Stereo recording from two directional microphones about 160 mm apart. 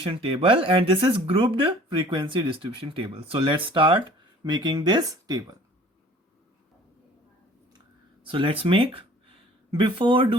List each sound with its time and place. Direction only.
0.0 s speech: 35° right (ahead or behind)
8.3 s speech: 35° right (ahead or behind)